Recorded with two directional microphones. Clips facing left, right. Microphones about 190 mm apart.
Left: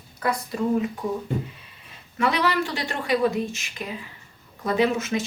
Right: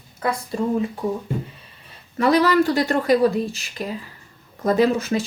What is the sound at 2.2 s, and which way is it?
A woman's voice, 40° right (ahead or behind).